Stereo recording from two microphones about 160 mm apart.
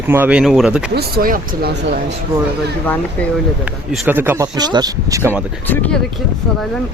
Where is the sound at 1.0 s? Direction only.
65° right (ahead or behind).